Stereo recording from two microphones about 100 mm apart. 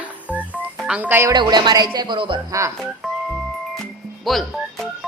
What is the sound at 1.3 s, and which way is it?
Speech, 45° right (ahead or behind).